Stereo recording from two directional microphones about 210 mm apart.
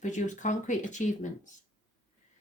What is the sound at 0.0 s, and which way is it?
Speech, 35° left (ahead or behind).